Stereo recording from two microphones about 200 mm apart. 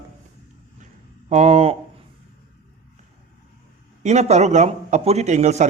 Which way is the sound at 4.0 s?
35° right (ahead or behind).